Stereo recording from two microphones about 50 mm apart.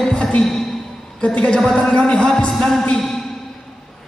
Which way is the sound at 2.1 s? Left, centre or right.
Centre.